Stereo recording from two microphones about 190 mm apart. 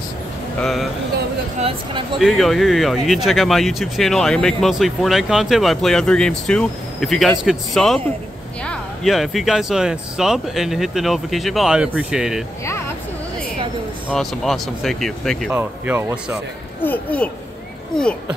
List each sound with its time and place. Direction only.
0.6 s speech: centre (ahead or behind)
1.6 s speech: 30° right (ahead or behind)
2.1 s speech: centre (ahead or behind)
12.6 s a sound: 15° left (ahead or behind)
14.0 s speech: centre (ahead or behind)
15.5 s speech: 10° right (ahead or behind)
16.8 s speech: 10° left (ahead or behind)